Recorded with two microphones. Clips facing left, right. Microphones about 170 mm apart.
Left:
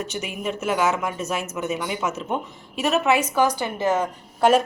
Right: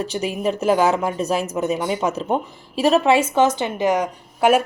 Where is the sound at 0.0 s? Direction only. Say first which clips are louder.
Right 6 dB; 35° right (ahead or behind).